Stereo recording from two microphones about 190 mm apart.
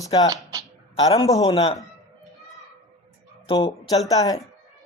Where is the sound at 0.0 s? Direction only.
20° left (ahead or behind).